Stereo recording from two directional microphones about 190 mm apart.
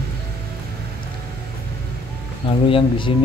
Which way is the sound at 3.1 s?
30° left (ahead or behind).